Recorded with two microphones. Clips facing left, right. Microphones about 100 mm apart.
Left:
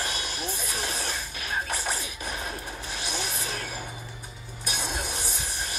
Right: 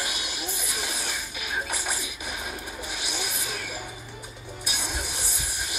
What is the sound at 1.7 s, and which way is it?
Music, 15° right (ahead or behind).